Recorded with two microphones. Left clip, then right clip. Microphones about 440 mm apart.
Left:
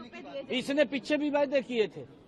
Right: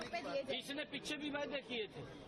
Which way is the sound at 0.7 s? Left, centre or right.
Left.